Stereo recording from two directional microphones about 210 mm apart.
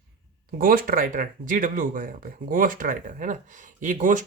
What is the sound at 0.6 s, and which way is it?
Speech, 40° right (ahead or behind).